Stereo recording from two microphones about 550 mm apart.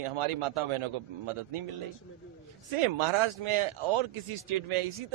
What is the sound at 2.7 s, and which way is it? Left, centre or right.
Speech, right.